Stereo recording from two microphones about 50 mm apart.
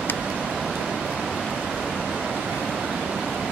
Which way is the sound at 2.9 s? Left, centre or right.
Centre.